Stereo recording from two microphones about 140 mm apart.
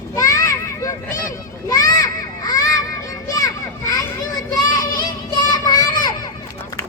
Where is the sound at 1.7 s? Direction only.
25° left (ahead or behind).